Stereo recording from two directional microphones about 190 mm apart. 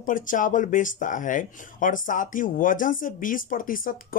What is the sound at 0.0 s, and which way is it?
Speech, 45° left (ahead or behind).